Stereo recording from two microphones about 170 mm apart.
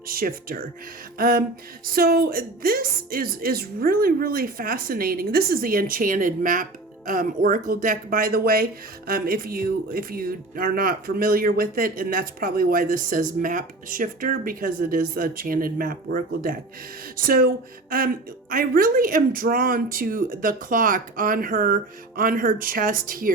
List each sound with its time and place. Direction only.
0.1 s a woman's voice: 60° right (ahead or behind)